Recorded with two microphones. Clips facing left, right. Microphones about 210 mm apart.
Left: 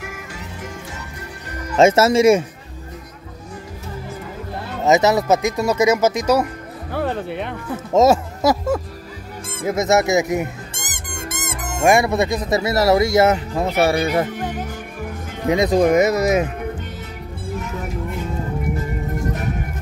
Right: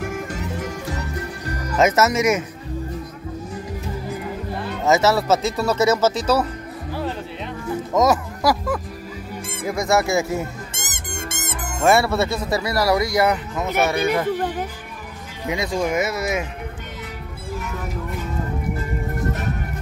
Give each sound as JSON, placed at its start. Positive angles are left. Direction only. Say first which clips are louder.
{"t": 1.8, "sound": "speech", "louder": "left 5 dB", "side_deg": 30}
{"t": 4.8, "sound": "speech", "louder": "left 2 dB", "side_deg": 20}
{"t": 6.9, "sound": "speech", "louder": "left 5 dB", "side_deg": 60}
{"t": 7.9, "sound": "speech", "louder": "left 5 dB", "side_deg": 25}
{"t": 10.7, "sound": "music", "louder": "even", "side_deg": -25}
{"t": 11.8, "sound": "speech", "louder": "left 2 dB", "side_deg": 15}
{"t": 15.5, "sound": "speech", "louder": "left 7 dB", "side_deg": 40}